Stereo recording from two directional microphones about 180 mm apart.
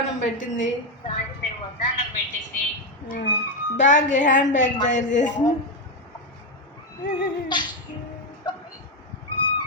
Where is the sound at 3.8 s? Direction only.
40° left (ahead or behind).